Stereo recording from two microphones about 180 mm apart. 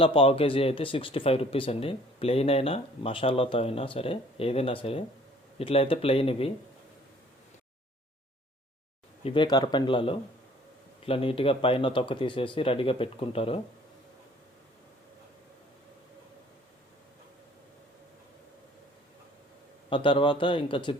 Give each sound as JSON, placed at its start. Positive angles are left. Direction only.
{"t": 0.0, "sound": "speech", "side_deg": 30}
{"t": 9.2, "sound": "a man's voice", "side_deg": 25}
{"t": 19.9, "sound": "a man's voice", "side_deg": 25}